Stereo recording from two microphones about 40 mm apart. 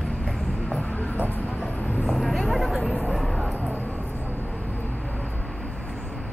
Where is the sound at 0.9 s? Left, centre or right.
Left.